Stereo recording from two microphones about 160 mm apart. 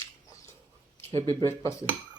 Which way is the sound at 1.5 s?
20° left (ahead or behind).